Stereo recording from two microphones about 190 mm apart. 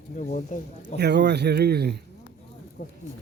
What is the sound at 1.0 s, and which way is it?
Speech, 65° right (ahead or behind).